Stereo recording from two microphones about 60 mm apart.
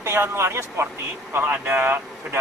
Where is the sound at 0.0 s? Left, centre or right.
Right.